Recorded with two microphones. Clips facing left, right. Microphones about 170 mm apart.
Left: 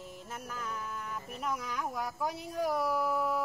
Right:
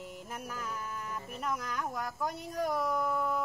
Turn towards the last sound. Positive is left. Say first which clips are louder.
# left 1 dB
turn(degrees=5)  # may be behind; listen again after turning